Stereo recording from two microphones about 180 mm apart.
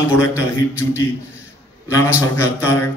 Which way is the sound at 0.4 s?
15° left (ahead or behind).